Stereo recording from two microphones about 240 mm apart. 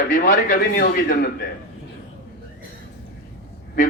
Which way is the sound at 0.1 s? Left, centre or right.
Left.